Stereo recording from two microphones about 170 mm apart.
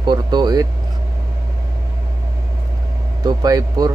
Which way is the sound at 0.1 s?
25° right (ahead or behind).